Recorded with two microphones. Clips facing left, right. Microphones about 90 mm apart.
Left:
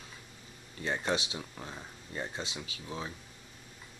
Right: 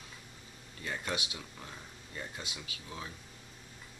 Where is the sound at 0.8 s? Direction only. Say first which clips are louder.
Left 5 dB; 30° left (ahead or behind).